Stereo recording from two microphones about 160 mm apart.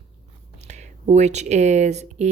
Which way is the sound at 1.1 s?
45° right (ahead or behind).